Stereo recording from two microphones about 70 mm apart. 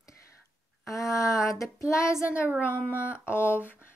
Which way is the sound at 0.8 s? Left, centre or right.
Left.